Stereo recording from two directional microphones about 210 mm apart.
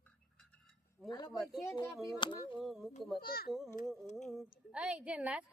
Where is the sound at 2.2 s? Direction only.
25° left (ahead or behind).